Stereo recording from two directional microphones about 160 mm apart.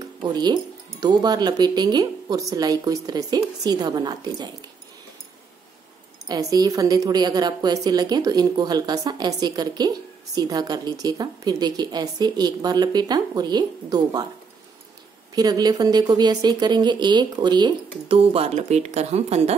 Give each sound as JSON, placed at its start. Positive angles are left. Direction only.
{"t": 0.2, "sound": "a woman's voice", "side_deg": -25}
{"t": 6.2, "sound": "a woman's voice", "side_deg": -25}
{"t": 15.3, "sound": "a woman's voice", "side_deg": -25}